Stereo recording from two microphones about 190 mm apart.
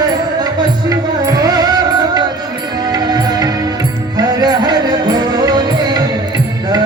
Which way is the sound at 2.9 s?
20° right (ahead or behind).